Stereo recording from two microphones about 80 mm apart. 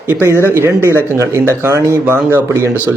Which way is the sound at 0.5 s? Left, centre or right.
Right.